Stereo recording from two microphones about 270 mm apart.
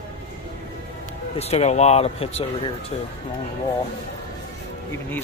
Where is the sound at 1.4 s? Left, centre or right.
Left.